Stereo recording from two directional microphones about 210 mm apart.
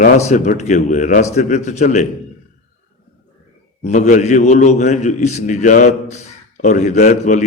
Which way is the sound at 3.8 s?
35° left (ahead or behind).